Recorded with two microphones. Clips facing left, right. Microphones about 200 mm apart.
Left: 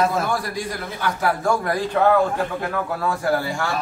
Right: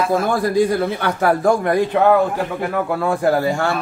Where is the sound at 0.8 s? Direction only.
65° right (ahead or behind).